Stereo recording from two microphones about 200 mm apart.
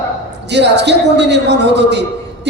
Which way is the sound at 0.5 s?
60° right (ahead or behind).